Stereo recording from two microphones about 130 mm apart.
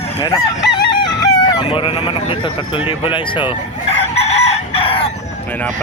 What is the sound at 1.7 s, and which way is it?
Speech, 40° left (ahead or behind).